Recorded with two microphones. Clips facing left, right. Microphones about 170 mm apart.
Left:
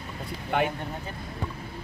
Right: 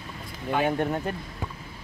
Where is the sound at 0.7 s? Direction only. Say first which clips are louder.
Right 9 dB; 60° right (ahead or behind).